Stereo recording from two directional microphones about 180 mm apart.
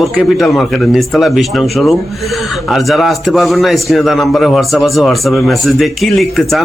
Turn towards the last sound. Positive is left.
turn(degrees=0)  # may be behind; listen again after turning